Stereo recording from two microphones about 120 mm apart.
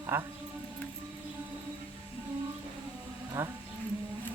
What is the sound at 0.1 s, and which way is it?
Speech, 20° right (ahead or behind).